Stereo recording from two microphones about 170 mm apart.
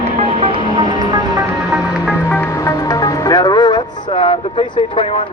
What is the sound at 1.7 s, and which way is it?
Music, 5° right (ahead or behind).